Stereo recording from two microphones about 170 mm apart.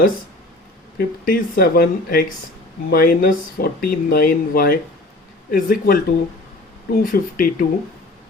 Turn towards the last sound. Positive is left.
turn(degrees=60)  # may be behind; listen again after turning